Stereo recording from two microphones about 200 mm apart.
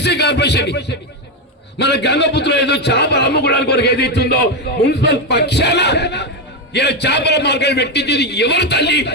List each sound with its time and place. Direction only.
0.0 s a man's voice: 55° left (ahead or behind)